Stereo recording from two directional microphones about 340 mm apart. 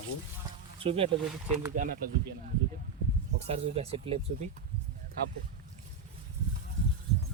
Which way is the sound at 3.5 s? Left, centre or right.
Centre.